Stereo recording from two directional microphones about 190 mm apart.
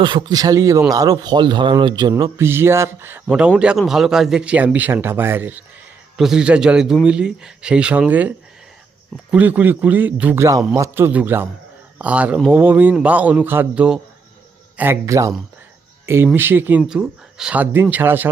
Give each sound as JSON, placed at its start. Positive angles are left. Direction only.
{"t": 0.0, "sound": "speech", "side_deg": -25}
{"t": 9.3, "sound": "speech", "side_deg": -10}